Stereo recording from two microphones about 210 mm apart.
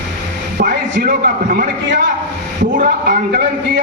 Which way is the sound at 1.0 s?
40° right (ahead or behind).